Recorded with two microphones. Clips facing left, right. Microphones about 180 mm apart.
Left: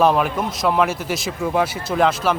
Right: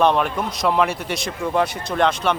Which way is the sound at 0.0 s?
5° left (ahead or behind).